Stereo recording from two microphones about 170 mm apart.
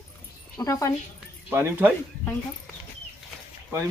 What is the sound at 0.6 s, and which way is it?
Speech, 20° left (ahead or behind).